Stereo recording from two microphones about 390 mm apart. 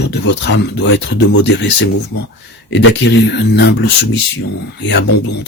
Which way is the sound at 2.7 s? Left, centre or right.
Left.